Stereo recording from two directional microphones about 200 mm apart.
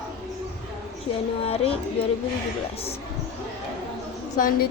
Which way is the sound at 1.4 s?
30° left (ahead or behind).